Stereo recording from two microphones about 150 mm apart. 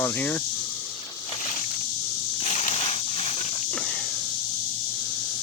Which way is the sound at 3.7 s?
5° left (ahead or behind).